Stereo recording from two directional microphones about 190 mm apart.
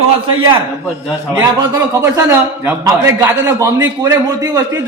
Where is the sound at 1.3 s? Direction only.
15° right (ahead or behind).